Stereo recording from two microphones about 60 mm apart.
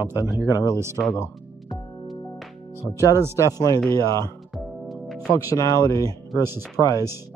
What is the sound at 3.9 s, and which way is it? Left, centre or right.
Speech, left.